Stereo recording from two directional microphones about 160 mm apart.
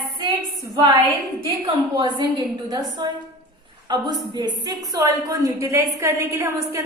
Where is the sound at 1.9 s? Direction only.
25° right (ahead or behind).